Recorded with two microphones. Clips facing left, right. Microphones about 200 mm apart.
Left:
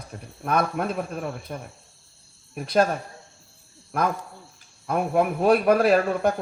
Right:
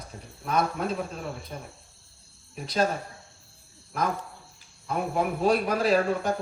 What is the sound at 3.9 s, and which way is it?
Speech, 60° left (ahead or behind).